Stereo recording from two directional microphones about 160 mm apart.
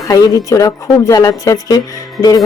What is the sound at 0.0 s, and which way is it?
Speech, 20° left (ahead or behind).